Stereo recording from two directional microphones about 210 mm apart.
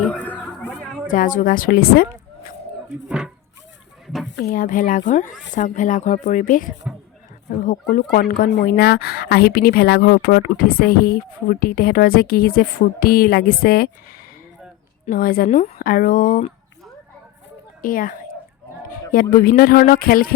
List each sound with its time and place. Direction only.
0.0 s a sound: 5° left (ahead or behind)
1.0 s a woman's voice: 40° left (ahead or behind)
3.1 s a sound: 5° right (ahead or behind)
4.0 s chicken: centre (ahead or behind)
4.4 s speech: 40° left (ahead or behind)
15.0 s speech: 40° left (ahead or behind)
17.8 s speech: 40° left (ahead or behind)
19.1 s speech: 45° left (ahead or behind)